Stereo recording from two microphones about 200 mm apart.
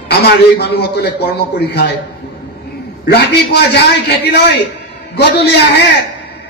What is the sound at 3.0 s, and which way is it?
A man's voice, 55° left (ahead or behind).